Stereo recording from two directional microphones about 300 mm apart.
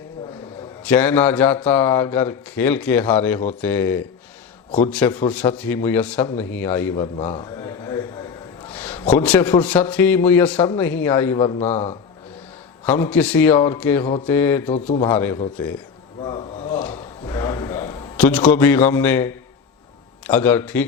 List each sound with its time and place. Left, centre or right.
0.9 s a man's voice: centre
11.7 s a man's voice: left
12.8 s a man's voice: centre
16.2 s a sound: centre
16.8 s a sound: centre
20.2 s a man's voice: centre